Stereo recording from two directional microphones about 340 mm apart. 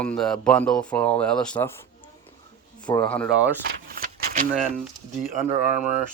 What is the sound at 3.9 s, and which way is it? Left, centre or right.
Keys jangling, right.